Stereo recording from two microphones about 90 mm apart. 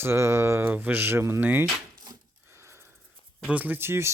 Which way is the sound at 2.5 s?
30° right (ahead or behind).